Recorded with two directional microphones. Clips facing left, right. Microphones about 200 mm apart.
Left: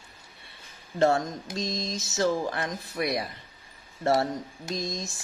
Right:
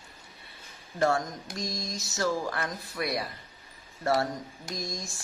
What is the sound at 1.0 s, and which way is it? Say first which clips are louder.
Speech: left 3 dB; 25° left (ahead or behind).